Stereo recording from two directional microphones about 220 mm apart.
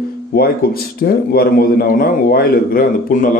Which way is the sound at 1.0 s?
45° left (ahead or behind).